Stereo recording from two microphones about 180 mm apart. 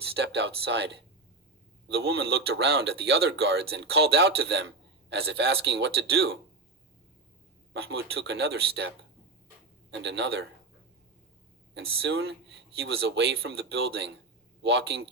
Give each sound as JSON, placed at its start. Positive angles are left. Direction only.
{"t": 0.2, "sound": "speech", "side_deg": -70}
{"t": 7.7, "sound": "speech", "side_deg": -70}
{"t": 9.9, "sound": "speech", "side_deg": -75}
{"t": 11.7, "sound": "speech", "side_deg": -75}